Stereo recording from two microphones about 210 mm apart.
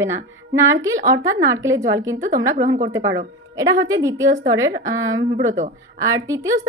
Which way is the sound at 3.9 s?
15° right (ahead or behind).